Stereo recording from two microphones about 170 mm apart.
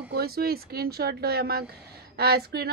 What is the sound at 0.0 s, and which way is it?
Speech, 75° right (ahead or behind).